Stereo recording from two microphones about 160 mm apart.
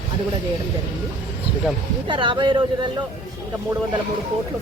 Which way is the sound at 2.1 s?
30° right (ahead or behind).